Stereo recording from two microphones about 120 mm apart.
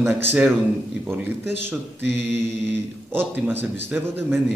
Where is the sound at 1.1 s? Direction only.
15° right (ahead or behind).